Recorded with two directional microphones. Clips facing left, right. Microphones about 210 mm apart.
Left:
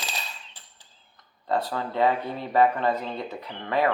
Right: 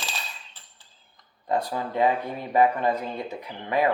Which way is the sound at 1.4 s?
15° right (ahead or behind).